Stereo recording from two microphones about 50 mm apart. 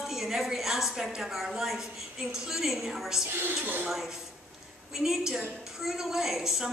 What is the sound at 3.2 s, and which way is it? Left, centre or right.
Speech, right.